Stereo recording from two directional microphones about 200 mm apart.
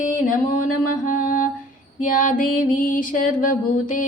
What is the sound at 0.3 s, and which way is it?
Mantra, 40° left (ahead or behind).